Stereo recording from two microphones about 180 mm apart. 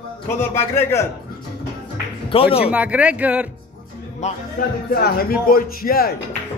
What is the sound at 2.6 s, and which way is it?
Speech, 5° right (ahead or behind).